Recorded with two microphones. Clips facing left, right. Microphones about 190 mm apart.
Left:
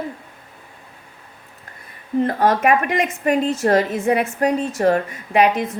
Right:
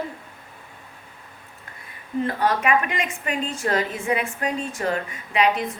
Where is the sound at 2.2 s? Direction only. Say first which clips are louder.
Left 5 dB; 45° left (ahead or behind).